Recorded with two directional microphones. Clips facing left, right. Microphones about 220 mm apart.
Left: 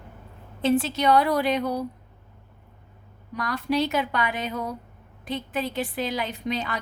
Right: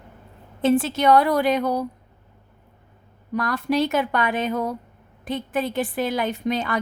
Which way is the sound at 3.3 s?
50° right (ahead or behind).